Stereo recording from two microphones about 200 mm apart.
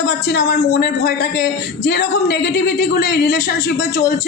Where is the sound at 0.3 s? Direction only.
60° left (ahead or behind).